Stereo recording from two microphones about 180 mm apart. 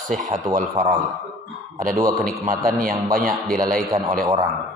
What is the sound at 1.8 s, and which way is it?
A man's voice, 55° right (ahead or behind).